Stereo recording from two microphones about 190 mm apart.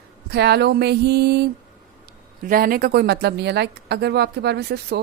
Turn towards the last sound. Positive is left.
turn(degrees=-60)  # may be behind; listen again after turning